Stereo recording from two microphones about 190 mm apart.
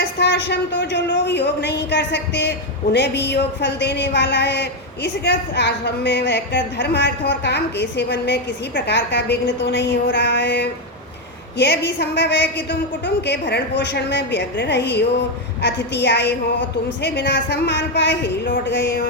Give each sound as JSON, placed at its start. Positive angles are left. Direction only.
{"t": 0.0, "sound": "a man's voice", "side_deg": 65}